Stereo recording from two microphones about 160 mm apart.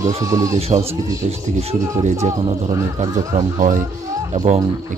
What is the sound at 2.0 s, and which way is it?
Speech, 45° right (ahead or behind).